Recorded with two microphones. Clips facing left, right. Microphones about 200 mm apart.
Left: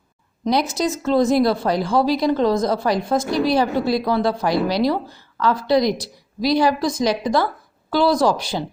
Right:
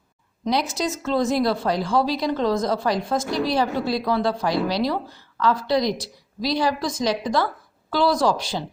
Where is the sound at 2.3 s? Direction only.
35° left (ahead or behind).